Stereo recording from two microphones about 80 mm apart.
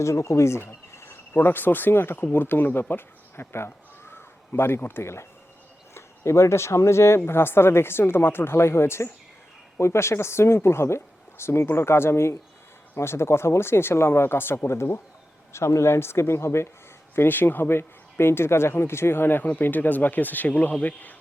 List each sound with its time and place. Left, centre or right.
0.0 s speech: left